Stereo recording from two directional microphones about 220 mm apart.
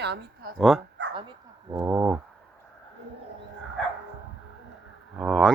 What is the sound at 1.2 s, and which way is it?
Bow-wow, 20° right (ahead or behind).